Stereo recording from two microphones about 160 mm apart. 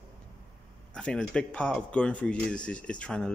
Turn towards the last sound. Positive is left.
turn(degrees=5)  # may be behind; listen again after turning